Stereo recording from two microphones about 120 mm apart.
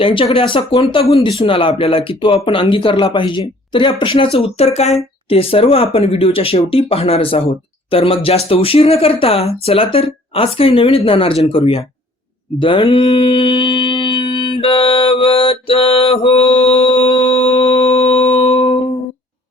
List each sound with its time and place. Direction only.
0.0 s speech: 45° left (ahead or behind); by 4.9 s 65° left (ahead or behind)
5.3 s speech: 50° left (ahead or behind)
12.5 s a sound: 45° left (ahead or behind)